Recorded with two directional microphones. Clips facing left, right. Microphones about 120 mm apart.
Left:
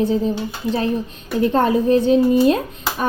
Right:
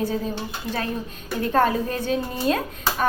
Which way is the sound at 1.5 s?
20° left (ahead or behind).